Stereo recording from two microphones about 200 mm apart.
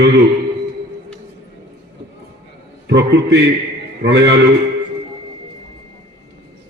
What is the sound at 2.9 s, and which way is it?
A man's voice, 60° right (ahead or behind).